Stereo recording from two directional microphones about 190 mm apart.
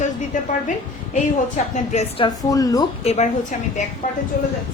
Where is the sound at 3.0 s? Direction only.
35° left (ahead or behind).